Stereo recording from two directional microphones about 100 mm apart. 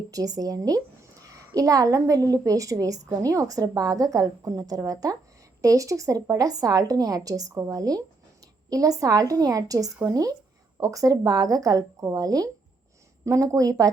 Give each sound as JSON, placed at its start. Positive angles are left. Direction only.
{"t": 0.1, "sound": "a woman's voice", "side_deg": -35}